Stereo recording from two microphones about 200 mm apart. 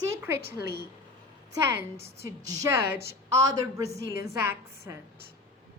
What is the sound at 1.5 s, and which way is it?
A woman's voice, 10° right (ahead or behind).